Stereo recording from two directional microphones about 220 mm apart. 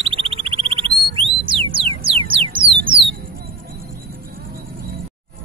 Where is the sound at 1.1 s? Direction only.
25° right (ahead or behind).